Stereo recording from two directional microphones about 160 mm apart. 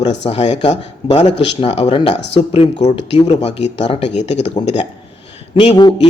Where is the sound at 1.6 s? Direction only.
40° left (ahead or behind).